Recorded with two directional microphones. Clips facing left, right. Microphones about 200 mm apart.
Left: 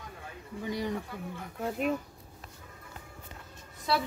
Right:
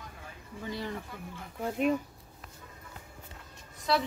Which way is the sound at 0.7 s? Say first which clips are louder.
Left 4 dB; 15° left (ahead or behind).